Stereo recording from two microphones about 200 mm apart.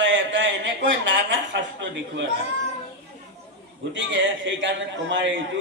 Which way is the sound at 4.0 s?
70° right (ahead or behind).